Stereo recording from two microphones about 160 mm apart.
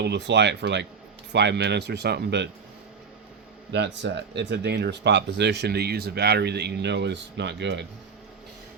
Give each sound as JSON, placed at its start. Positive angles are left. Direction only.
{"t": 0.0, "sound": "speech", "side_deg": -90}
{"t": 3.7, "sound": "speech", "side_deg": -90}